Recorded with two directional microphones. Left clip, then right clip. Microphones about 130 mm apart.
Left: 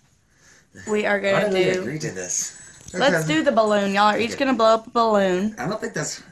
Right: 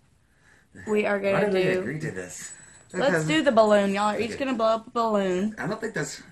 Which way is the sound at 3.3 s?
25° right (ahead or behind).